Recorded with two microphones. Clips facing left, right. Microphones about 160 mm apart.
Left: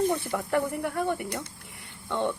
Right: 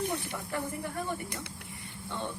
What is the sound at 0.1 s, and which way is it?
Speech, 65° left (ahead or behind).